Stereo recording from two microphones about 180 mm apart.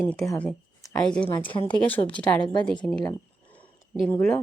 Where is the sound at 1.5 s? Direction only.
30° left (ahead or behind).